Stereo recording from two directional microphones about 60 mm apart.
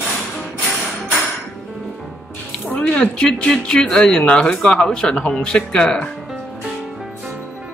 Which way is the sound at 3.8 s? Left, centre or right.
Centre.